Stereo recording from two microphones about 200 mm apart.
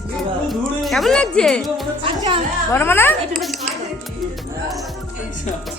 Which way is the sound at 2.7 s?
10° left (ahead or behind).